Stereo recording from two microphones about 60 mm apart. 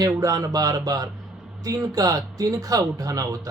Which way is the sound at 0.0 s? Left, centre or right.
Right.